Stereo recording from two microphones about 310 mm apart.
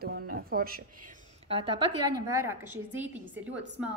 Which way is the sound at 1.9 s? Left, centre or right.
Right.